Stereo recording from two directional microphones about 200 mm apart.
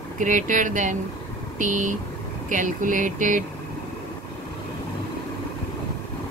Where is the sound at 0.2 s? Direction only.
40° right (ahead or behind).